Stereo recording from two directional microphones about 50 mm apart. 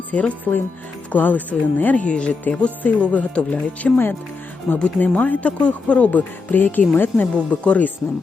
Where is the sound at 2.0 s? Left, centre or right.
Left.